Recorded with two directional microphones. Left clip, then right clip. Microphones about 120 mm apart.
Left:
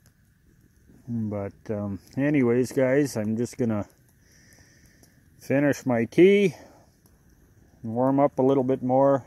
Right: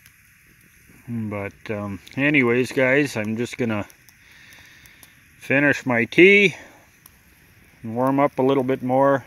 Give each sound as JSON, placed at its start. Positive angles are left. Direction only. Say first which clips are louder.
{"t": 1.0, "sound": "speech", "louder": "right 1 dB", "side_deg": 0}
{"t": 1.3, "sound": "speech", "louder": "right 4 dB", "side_deg": 10}
{"t": 2.6, "sound": "speech", "louder": "right 4 dB", "side_deg": 0}
{"t": 5.4, "sound": "speech", "louder": "right 5 dB", "side_deg": 5}
{"t": 7.8, "sound": "speech", "louder": "right 2 dB", "side_deg": -5}